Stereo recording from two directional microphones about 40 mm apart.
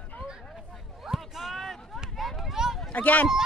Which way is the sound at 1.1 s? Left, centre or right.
Centre.